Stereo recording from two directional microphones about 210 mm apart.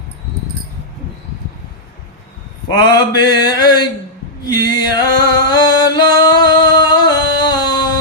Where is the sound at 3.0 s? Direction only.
20° left (ahead or behind).